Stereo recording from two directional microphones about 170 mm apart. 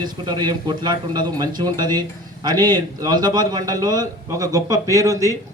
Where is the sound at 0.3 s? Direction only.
25° right (ahead or behind).